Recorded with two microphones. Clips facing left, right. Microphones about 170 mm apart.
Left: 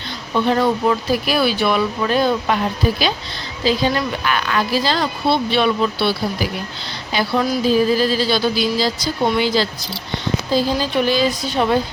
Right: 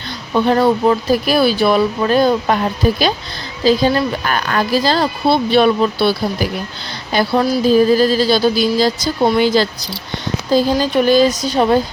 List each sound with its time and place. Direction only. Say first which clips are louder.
0.4 s a woman's voice: right 4 dB; 40° right (ahead or behind)